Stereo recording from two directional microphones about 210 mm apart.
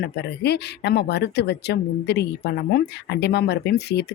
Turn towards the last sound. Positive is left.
turn(degrees=50)  # may be behind; listen again after turning